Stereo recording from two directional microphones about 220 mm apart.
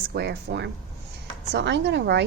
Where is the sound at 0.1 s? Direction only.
50° right (ahead or behind).